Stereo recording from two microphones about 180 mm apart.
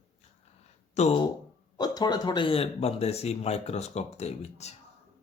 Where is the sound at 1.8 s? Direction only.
20° left (ahead or behind); by 4.8 s 40° left (ahead or behind).